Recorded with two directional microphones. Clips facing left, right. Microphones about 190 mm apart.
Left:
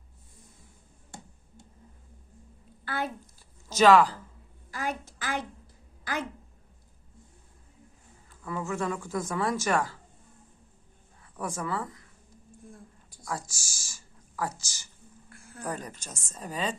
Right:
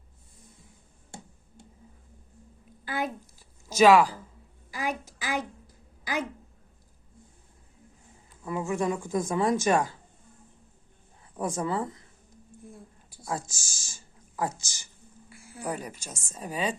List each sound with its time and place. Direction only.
2.8 s a child's voice: 15° right (ahead or behind)
8.4 s speech: 15° right (ahead or behind)
11.3 s speech: 20° right (ahead or behind)
13.2 s a woman's voice: 20° right (ahead or behind)